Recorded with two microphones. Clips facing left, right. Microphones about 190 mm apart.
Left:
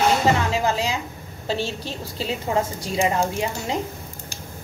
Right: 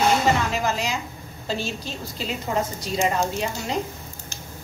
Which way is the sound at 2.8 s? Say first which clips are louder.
Left 1 dB; 20° left (ahead or behind).